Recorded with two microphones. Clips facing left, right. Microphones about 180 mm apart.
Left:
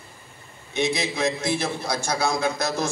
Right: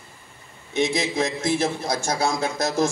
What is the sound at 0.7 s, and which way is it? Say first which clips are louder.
A man's voice: right 2 dB; 45° right (ahead or behind).